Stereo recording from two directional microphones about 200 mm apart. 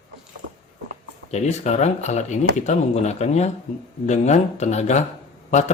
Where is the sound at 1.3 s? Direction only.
35° left (ahead or behind).